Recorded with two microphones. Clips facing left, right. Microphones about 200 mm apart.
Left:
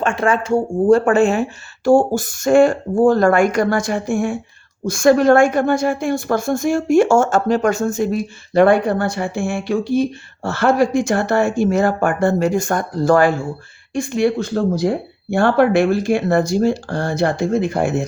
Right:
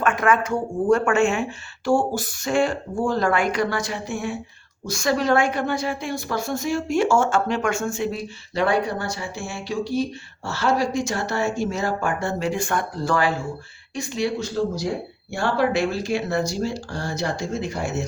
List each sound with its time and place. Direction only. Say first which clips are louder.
0.0 s a woman's voice: left 2 dB; 30° left (ahead or behind); by 18.0 s 55° left (ahead or behind)